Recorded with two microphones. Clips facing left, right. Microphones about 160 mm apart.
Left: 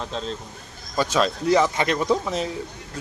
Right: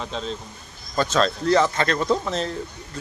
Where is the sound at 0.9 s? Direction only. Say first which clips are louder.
Right 1 dB; 10° left (ahead or behind).